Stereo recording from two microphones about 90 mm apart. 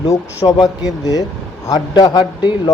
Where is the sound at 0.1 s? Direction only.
40° left (ahead or behind).